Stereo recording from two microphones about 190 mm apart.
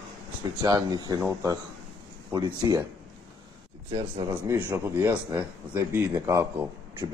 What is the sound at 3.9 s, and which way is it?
A man's voice, 20° right (ahead or behind).